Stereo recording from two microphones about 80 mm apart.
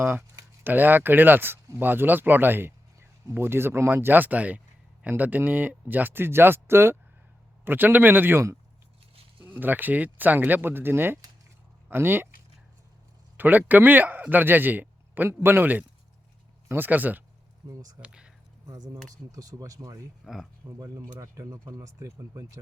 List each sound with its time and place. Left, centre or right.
0.0 s speech: right
13.3 s a man's voice: right
17.6 s speech: right
18.0 s speech: centre
19.1 s speech: right
20.2 s speech: centre
20.7 s speech: right
21.7 s speech: right